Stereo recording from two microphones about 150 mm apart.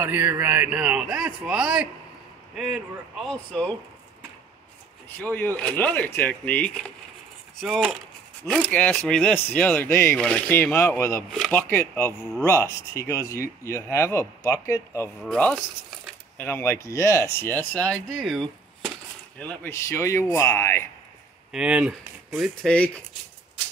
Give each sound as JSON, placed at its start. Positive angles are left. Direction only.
{"t": 0.0, "sound": "a man's voice", "side_deg": -15}
{"t": 5.2, "sound": "speech", "side_deg": 10}
{"t": 7.6, "sound": "a man's voice", "side_deg": -5}
{"t": 15.2, "sound": "speech", "side_deg": 5}
{"t": 19.3, "sound": "speech", "side_deg": 10}
{"t": 21.5, "sound": "a man's voice", "side_deg": -5}